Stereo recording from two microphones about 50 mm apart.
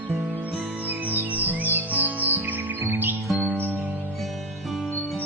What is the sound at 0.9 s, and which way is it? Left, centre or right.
Music, right.